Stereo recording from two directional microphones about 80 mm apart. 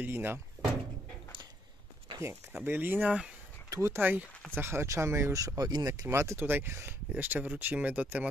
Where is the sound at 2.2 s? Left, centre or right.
Right.